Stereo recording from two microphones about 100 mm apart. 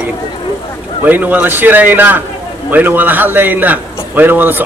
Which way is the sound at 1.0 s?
15° right (ahead or behind).